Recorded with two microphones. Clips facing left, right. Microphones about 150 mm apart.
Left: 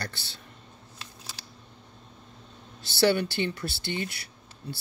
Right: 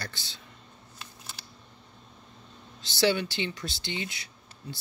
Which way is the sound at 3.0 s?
50° left (ahead or behind).